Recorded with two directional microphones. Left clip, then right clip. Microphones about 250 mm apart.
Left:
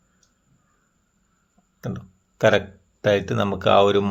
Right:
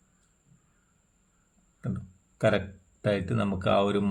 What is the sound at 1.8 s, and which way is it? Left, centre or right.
Speech, centre.